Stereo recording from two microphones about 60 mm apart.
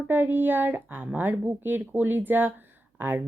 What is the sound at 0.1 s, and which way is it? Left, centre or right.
A woman's voice, right.